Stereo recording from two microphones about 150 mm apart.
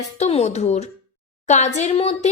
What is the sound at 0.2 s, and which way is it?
Speech, 45° left (ahead or behind).